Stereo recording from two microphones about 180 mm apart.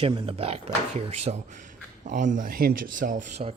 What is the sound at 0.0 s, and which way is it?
Speech, 30° right (ahead or behind).